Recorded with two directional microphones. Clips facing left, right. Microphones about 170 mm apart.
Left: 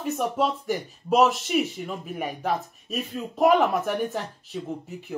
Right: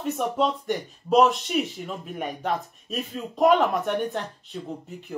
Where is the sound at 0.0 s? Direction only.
Centre (ahead or behind).